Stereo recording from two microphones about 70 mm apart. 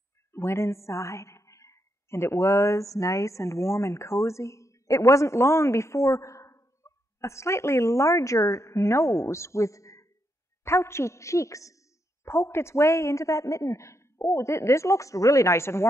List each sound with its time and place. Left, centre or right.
0.3 s a woman's voice: left
12.3 s speech: left